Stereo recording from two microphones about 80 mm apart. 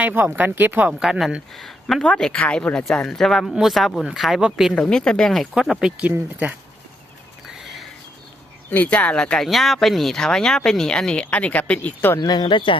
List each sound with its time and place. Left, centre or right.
0.0 s speech: right
1.5 s speech: centre
4.7 s speech: centre
5.5 s speech: centre
7.4 s a sound: centre
8.7 s speech: centre
9.5 s speech: centre; by 12.2 s left
12.2 s speech: left